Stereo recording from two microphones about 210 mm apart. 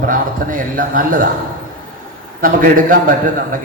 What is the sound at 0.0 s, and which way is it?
A man's voice, 40° right (ahead or behind).